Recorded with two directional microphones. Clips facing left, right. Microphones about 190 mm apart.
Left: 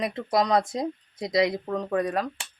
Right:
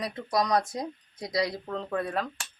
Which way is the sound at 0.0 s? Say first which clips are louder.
Left 4 dB; 25° left (ahead or behind).